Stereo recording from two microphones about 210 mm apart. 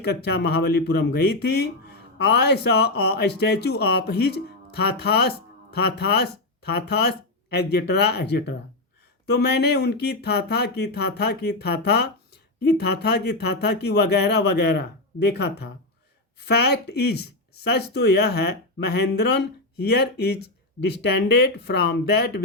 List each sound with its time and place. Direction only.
0.0 s speech: 50° left (ahead or behind)
7.5 s speech: 50° left (ahead or behind)